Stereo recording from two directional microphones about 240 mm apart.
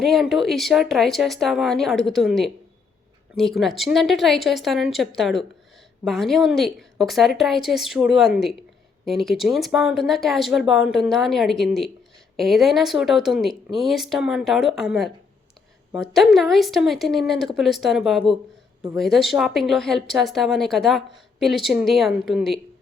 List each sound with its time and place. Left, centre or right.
0.0 s a woman's voice: centre